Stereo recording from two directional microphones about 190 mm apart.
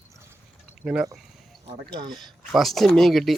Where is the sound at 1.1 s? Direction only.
Centre (ahead or behind).